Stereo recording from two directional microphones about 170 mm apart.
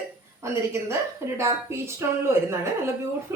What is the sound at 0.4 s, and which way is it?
A woman's voice, 15° right (ahead or behind).